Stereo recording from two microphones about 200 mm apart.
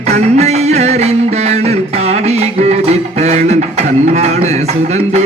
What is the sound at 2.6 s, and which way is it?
Music, 30° right (ahead or behind).